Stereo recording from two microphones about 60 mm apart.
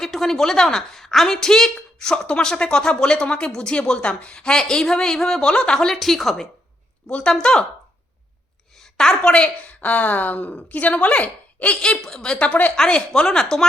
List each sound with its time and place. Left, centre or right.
0.0 s a woman's voice: centre
5.9 s a woman's voice: centre
7.1 s a woman's voice: left
7.3 s a woman's voice: centre
8.8 s a woman's voice: centre; by 11.8 s left
11.8 s a woman's voice: centre
12.4 s a woman's voice: left
12.7 s a woman's voice: centre